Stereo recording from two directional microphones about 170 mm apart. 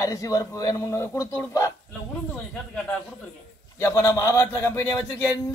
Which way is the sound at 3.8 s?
20° left (ahead or behind).